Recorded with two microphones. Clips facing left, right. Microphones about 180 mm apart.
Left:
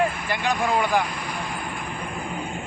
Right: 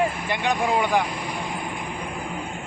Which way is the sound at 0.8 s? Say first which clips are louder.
Right 1 dB; 20° right (ahead or behind).